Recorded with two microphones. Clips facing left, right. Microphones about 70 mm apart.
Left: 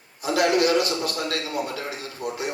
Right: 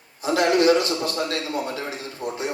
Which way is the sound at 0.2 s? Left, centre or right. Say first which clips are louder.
Right 1 dB; right.